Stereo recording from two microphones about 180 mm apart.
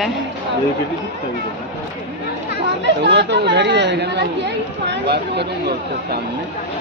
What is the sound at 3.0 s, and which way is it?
Speech, 70° right (ahead or behind).